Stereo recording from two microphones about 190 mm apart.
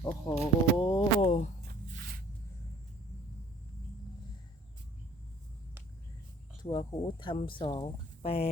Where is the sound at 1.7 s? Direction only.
50° right (ahead or behind).